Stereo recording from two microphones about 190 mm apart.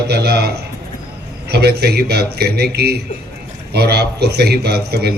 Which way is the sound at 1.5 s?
55° right (ahead or behind).